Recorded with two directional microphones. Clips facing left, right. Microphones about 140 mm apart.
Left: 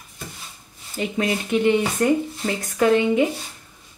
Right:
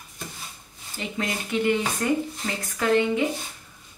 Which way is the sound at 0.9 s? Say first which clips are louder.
Left 6 dB; 20° left (ahead or behind).